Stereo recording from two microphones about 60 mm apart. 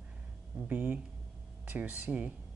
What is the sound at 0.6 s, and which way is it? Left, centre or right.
Speech, right.